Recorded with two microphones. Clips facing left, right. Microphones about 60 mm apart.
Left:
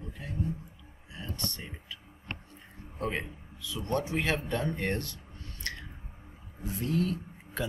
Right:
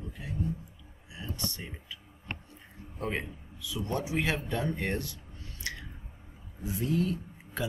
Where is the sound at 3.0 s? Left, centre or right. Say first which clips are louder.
Even; centre.